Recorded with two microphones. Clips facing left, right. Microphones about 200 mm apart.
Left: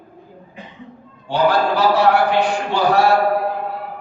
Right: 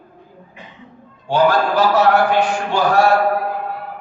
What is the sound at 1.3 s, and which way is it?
A man's voice, 45° right (ahead or behind).